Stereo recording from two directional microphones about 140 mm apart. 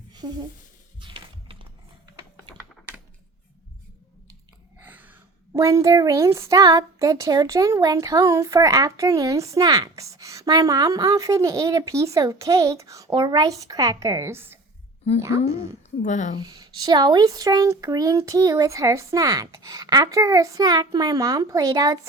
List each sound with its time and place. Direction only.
0.1 s a sound: 30° right (ahead or behind)
0.9 s music: 35° right (ahead or behind)
4.8 s a woman's voice: 10° right (ahead or behind)
16.0 s speech: 60° left (ahead or behind)
16.4 s a woman's voice: 25° right (ahead or behind)